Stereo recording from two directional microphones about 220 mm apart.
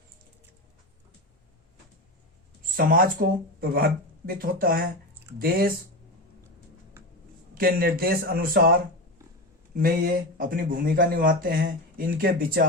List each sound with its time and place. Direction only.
2.7 s a man's voice: 40° right (ahead or behind)
7.5 s a man's voice: 40° right (ahead or behind)
9.7 s speech: 40° right (ahead or behind)